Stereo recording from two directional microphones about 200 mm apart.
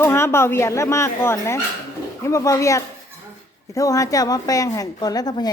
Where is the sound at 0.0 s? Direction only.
10° left (ahead or behind).